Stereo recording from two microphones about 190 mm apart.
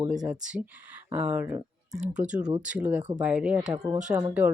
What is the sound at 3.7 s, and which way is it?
Speech, 20° right (ahead or behind).